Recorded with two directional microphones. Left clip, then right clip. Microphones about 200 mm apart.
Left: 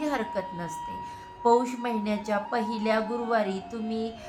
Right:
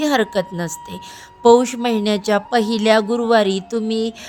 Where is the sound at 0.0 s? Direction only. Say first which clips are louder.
Right 11 dB; 50° right (ahead or behind).